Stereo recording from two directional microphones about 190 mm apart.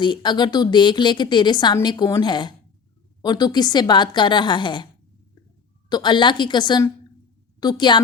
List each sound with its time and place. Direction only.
0.0 s a woman's voice: 25° left (ahead or behind)
5.9 s a woman's voice: 25° left (ahead or behind)